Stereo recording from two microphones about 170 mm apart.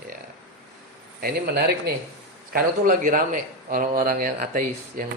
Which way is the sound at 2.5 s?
55° right (ahead or behind).